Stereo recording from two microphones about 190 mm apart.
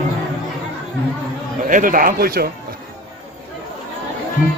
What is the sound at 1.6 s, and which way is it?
Speech, 45° right (ahead or behind).